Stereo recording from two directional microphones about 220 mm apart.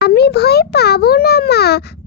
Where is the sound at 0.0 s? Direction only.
45° left (ahead or behind).